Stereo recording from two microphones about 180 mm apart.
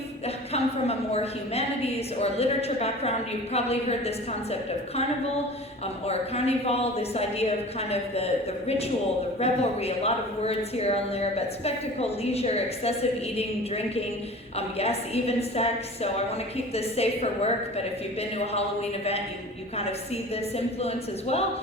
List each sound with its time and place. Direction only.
0.3 s a sound: 35° left (ahead or behind)
2.1 s a woman's voice: 35° left (ahead or behind)
6.1 s a woman's voice: 35° left (ahead or behind)
20.3 s a woman's voice: 35° left (ahead or behind)